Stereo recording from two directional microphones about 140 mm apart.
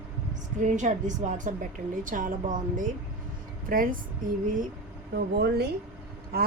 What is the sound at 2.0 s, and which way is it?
Speech, 70° right (ahead or behind).